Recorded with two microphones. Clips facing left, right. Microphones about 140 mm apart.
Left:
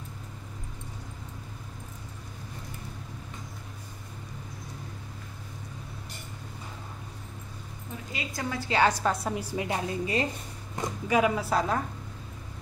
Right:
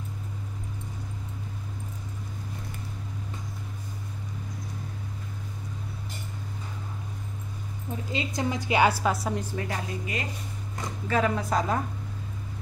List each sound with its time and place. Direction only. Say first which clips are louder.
8.1 s a woman's voice: right 5 dB; 25° right (ahead or behind); by 9.4 s centre (ahead or behind)
9.4 s speech: left 1 dB; 10° left (ahead or behind)
9.7 s speech: left 3 dB; 30° left (ahead or behind)
10.8 s speech: left 2 dB; 15° left (ahead or behind)